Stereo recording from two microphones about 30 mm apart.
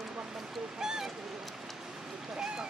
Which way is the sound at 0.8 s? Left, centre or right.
Centre.